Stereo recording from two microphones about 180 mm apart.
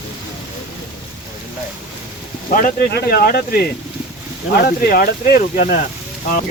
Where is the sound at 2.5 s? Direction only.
50° left (ahead or behind).